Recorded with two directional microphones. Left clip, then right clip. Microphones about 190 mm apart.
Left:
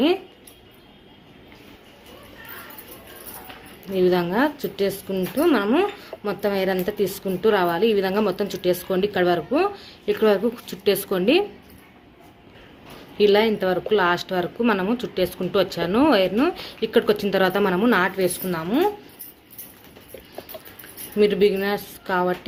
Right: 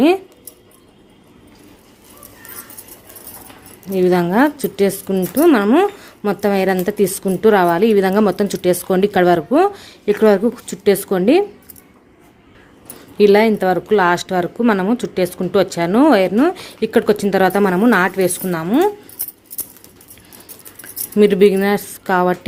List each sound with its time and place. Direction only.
3.9 s a woman's voice: 45° right (ahead or behind)
13.1 s speech: 45° right (ahead or behind)
21.2 s speech: 50° right (ahead or behind)